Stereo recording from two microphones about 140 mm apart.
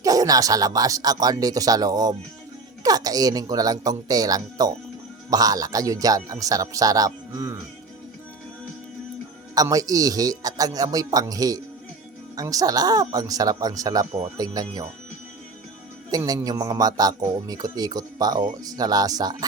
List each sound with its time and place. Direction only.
0.0 s a man's voice: 25° right (ahead or behind)
9.6 s a man's voice: 25° right (ahead or behind)
16.1 s a man's voice: 25° right (ahead or behind)